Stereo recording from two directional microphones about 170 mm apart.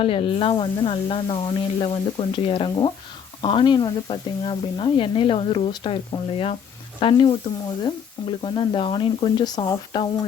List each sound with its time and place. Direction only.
0.0 s sizzle: 30° left (ahead or behind)
7.0 s speech: 30° left (ahead or behind)
8.4 s speech: 30° left (ahead or behind)